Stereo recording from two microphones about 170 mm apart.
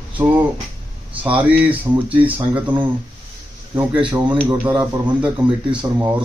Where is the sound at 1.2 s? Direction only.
10° right (ahead or behind).